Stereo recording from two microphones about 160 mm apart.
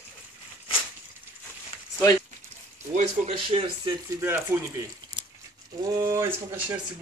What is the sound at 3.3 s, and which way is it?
Speech, 30° right (ahead or behind).